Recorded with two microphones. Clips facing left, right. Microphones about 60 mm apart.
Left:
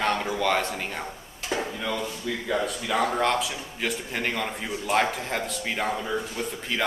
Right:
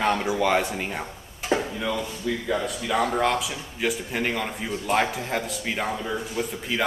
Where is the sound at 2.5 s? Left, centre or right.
Centre.